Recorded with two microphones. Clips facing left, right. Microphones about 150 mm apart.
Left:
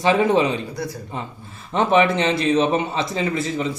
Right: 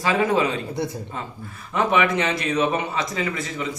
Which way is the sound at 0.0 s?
25° left (ahead or behind).